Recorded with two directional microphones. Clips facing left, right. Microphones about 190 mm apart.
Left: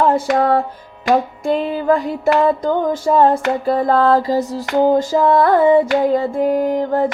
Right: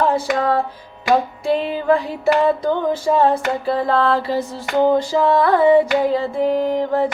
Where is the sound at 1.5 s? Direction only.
45° left (ahead or behind).